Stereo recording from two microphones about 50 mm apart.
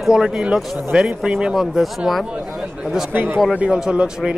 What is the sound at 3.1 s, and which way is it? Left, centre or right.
Speech, right.